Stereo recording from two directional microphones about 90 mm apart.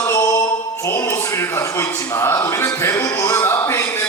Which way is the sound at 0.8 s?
25° left (ahead or behind).